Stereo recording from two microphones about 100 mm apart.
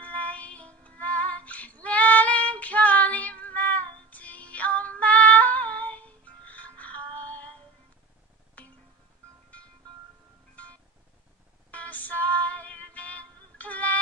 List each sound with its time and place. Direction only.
0.0 s child singing: 15° left (ahead or behind)
8.6 s music: 15° left (ahead or behind)